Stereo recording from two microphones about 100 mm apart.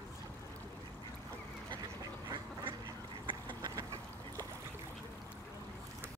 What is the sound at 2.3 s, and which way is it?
Duck, 55° right (ahead or behind).